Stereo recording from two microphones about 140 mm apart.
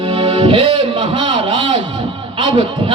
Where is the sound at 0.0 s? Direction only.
40° right (ahead or behind).